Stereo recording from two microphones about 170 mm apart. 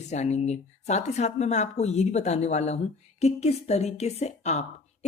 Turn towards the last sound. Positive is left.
turn(degrees=40)  # may be behind; listen again after turning